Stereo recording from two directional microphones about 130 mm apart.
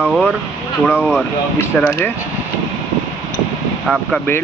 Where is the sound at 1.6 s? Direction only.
15° left (ahead or behind).